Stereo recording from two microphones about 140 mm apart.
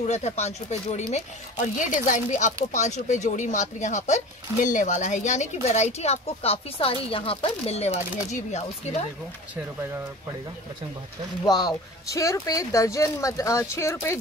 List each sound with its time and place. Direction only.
0.0 s speech: 55° left (ahead or behind)
1.1 s speech: 70° left (ahead or behind); by 9.0 s 50° left (ahead or behind)
11.4 s speech: 30° left (ahead or behind)